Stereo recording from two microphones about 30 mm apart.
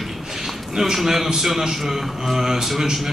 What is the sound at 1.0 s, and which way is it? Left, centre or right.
A man's voice, centre.